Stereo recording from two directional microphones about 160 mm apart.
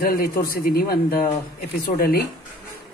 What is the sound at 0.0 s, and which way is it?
A woman's voice, 65° left (ahead or behind).